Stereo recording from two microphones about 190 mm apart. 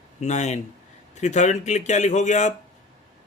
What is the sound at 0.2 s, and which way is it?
Speech, 35° left (ahead or behind).